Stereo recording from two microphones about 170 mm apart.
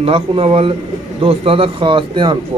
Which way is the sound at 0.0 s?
30° right (ahead or behind).